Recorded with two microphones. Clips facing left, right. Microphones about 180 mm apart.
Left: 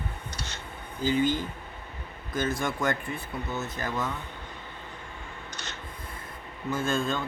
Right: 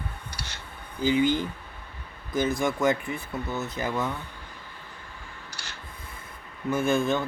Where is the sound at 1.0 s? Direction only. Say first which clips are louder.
Right 2 dB; 15° right (ahead or behind).